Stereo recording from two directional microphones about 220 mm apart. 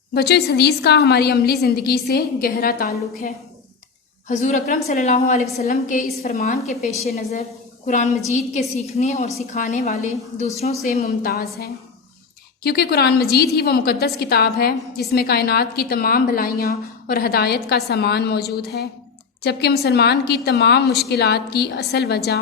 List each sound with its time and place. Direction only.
0.1 s a woman's voice: 45° left (ahead or behind)
7.9 s a woman's voice: 35° left (ahead or behind)
11.2 s a woman's voice: 45° left (ahead or behind)